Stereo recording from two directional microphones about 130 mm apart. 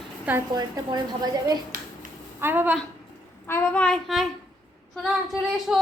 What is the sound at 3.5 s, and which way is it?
Speech, 10° left (ahead or behind).